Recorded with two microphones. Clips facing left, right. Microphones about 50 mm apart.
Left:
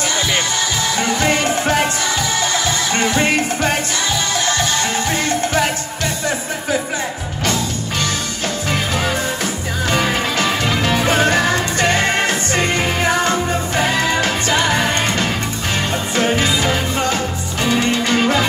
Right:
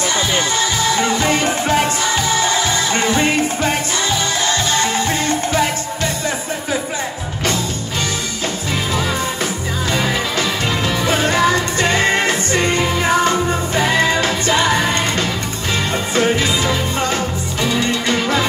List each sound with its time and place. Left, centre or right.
0.6 s music: right
3.2 s music: left
4.6 s music: right
9.8 s music: left
12.0 s music: right
12.4 s music: left
13.8 s music: right
14.8 s music: left
17.6 s music: left